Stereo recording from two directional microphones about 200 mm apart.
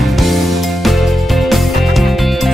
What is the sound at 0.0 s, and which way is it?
Music, centre (ahead or behind).